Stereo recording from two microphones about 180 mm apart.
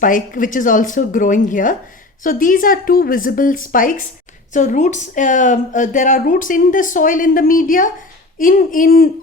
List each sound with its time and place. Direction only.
0.0 s a woman's voice: 50° left (ahead or behind)